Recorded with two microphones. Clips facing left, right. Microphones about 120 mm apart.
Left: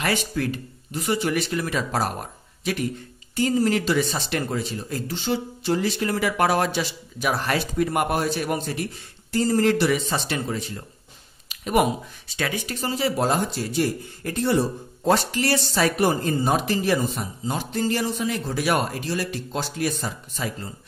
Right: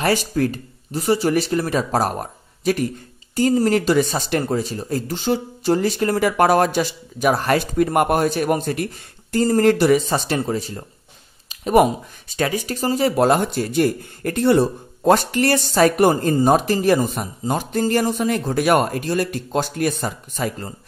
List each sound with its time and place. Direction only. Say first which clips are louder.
0.0 s speech: right 6 dB; 40° right (ahead or behind)